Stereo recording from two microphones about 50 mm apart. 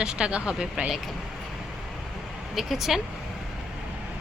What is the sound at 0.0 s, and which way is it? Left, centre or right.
Speech, centre.